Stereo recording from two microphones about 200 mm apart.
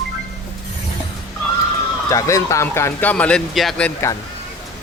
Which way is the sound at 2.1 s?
15° left (ahead or behind).